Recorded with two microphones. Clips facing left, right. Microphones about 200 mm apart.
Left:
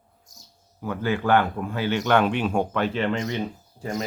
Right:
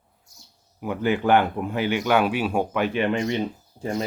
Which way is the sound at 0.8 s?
15° right (ahead or behind).